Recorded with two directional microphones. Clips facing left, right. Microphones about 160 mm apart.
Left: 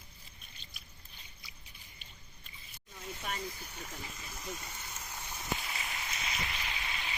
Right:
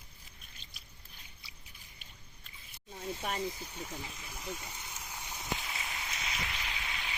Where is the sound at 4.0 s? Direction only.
10° right (ahead or behind).